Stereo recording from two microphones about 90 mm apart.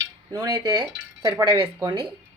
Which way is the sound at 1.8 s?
75° right (ahead or behind).